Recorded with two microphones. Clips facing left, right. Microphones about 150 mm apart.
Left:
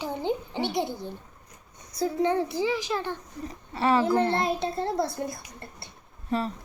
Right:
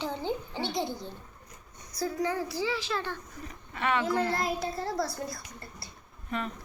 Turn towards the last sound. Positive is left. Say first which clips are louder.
# left 6 dB
turn(degrees=35)  # may be behind; listen again after turning